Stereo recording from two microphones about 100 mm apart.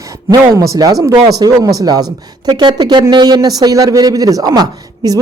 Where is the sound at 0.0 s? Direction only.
35° right (ahead or behind).